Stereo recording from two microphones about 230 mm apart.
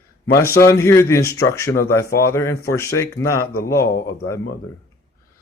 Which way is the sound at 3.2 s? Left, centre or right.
Left.